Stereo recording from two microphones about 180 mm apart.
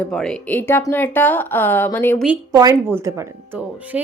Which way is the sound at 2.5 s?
15° right (ahead or behind).